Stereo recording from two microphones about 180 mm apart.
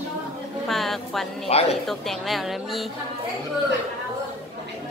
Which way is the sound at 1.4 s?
35° left (ahead or behind).